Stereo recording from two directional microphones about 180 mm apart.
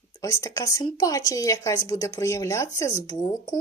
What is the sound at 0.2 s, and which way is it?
Speech, 20° left (ahead or behind).